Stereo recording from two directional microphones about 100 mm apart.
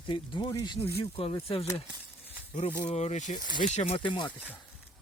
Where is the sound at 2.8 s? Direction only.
90° left.